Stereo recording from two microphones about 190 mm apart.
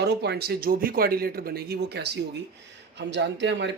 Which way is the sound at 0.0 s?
60° right (ahead or behind).